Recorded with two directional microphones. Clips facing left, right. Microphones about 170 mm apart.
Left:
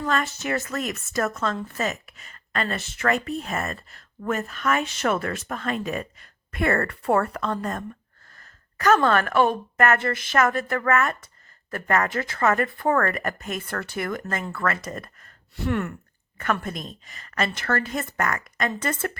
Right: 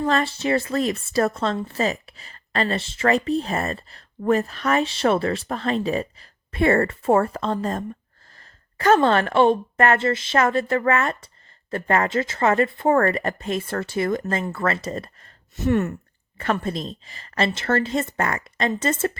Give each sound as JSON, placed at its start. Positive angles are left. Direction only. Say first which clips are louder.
{"t": 0.0, "sound": "a woman's voice", "louder": "right 4 dB", "side_deg": -30}